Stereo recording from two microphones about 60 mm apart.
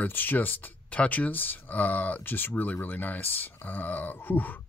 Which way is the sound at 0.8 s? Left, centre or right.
Left.